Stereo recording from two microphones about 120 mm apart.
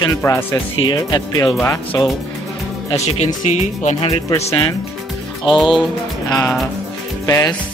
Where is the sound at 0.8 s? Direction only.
40° left (ahead or behind).